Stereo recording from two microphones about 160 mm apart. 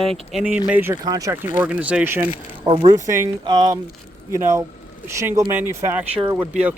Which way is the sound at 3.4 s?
30° right (ahead or behind).